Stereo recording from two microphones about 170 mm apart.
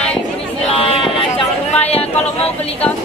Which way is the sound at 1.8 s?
35° left (ahead or behind).